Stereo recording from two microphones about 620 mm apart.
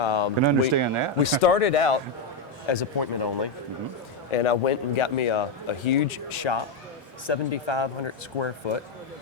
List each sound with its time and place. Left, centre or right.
0.0 s a sound: left
0.4 s speech: right
1.2 s speech: left
2.6 s speech: left
4.3 s speech: left